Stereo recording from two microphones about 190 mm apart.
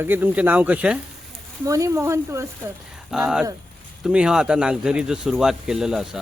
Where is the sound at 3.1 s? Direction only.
5° right (ahead or behind).